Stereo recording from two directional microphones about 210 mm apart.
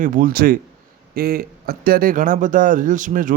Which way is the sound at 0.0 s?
40° right (ahead or behind).